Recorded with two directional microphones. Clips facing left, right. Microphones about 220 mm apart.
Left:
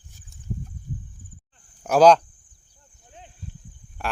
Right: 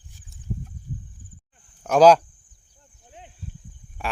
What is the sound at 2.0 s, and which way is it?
Speech, 5° right (ahead or behind).